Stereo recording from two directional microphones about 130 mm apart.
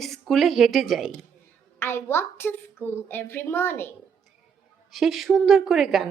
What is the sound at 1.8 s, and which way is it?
Speech, 15° left (ahead or behind).